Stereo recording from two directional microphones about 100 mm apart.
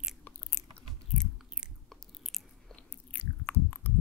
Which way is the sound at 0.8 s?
5° left (ahead or behind).